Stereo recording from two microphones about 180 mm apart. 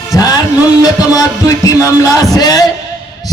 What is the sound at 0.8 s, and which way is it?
Music, 20° left (ahead or behind).